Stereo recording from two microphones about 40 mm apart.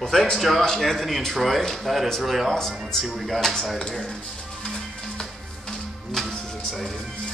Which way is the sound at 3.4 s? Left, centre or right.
Centre.